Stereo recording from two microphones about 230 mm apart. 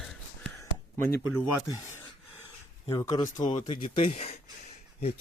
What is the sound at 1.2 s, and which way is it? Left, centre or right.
Speech, left.